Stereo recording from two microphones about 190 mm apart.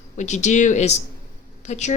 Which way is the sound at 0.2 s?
40° left (ahead or behind).